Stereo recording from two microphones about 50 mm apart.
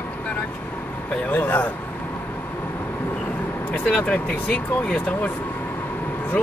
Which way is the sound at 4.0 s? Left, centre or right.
Centre.